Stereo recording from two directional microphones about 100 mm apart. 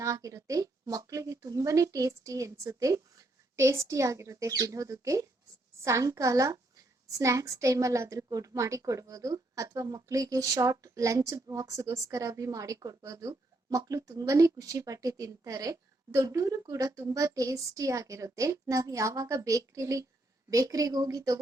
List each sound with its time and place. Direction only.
0.0 s a woman's voice: 35° right (ahead or behind)